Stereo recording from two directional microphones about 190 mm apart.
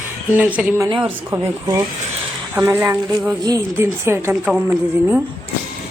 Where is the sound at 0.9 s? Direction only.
25° right (ahead or behind); by 5.1 s 10° right (ahead or behind).